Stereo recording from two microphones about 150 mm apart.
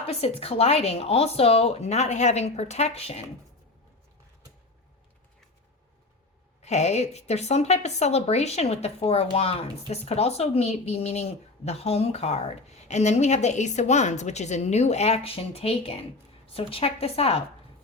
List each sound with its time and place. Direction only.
0.0 s a woman's voice: 40° left (ahead or behind)
6.6 s a woman's voice: 50° left (ahead or behind)